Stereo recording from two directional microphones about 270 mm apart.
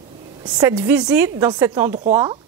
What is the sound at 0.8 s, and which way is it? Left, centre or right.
A woman's voice, centre.